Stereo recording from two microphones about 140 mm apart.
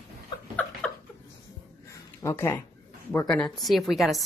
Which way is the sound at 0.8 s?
5° left (ahead or behind).